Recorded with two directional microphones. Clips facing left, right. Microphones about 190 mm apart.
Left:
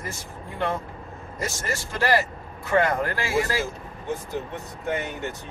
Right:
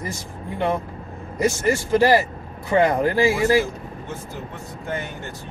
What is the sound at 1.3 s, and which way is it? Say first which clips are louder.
Speech: right 10 dB; 15° right (ahead or behind).